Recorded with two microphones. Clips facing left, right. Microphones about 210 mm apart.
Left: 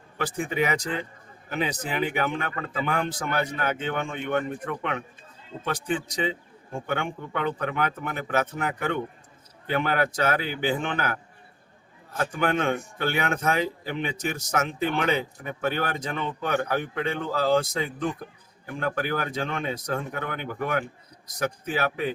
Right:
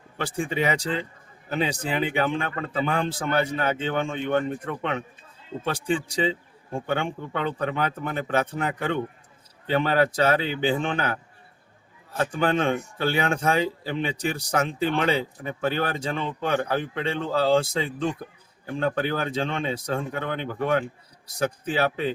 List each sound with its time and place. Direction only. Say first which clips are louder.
0.2 s speech: even; 30° right (ahead or behind)